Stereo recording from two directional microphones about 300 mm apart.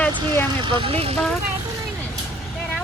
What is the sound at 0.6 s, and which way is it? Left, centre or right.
Speech, centre.